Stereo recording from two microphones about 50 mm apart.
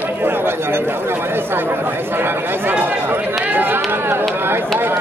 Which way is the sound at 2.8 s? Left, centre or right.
Right.